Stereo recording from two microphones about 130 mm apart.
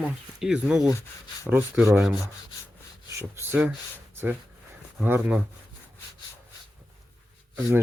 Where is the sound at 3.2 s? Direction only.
15° right (ahead or behind).